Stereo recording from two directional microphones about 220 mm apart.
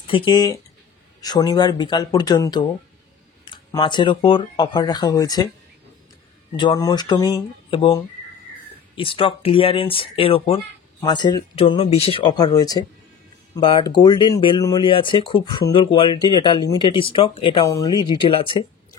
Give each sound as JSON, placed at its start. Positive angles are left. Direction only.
{"t": 0.0, "sound": "speech", "side_deg": 20}
{"t": 3.7, "sound": "speech", "side_deg": 20}
{"t": 6.5, "sound": "speech", "side_deg": 20}